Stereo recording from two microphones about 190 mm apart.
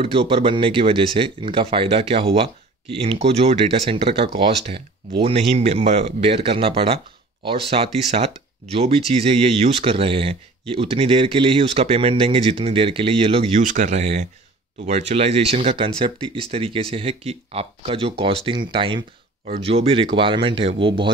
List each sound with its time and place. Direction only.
0.0 s speech: 30° right (ahead or behind)